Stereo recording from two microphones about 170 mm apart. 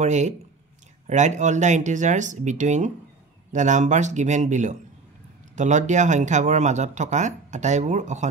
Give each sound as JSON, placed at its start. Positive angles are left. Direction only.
{"t": 0.0, "sound": "speech", "side_deg": -45}